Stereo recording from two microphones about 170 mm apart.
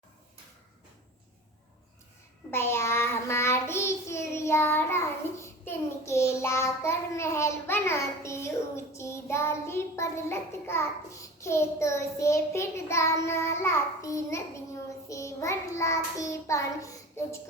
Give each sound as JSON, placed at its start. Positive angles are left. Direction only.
{"t": 2.5, "sound": "child singing", "side_deg": 15}